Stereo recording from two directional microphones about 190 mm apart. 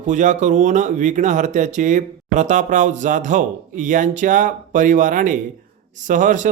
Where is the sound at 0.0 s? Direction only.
40° right (ahead or behind).